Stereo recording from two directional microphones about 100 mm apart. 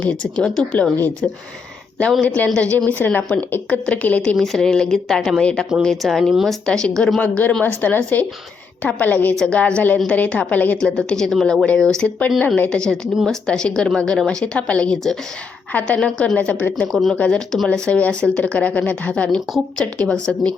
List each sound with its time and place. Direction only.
0.0 s speech: 10° left (ahead or behind)